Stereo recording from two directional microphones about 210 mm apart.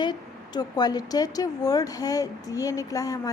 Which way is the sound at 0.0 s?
20° left (ahead or behind).